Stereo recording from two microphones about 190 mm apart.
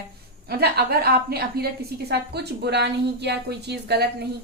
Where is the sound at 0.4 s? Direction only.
55° right (ahead or behind).